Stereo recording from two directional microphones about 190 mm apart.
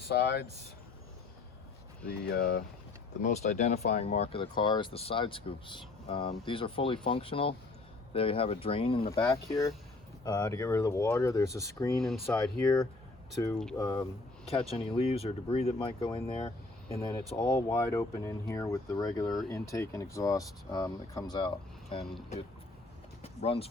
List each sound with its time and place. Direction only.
0.0 s speech: 60° left (ahead or behind)
2.0 s speech: 60° left (ahead or behind)
3.2 s speech: 35° left (ahead or behind)
9.2 s speech: 15° left (ahead or behind)
11.9 s speech: centre (ahead or behind)
13.7 s speech: 15° left (ahead or behind)
14.4 s speech: 30° left (ahead or behind)
17.4 s speech: 15° left (ahead or behind)
23.2 s a sound: 30° left (ahead or behind)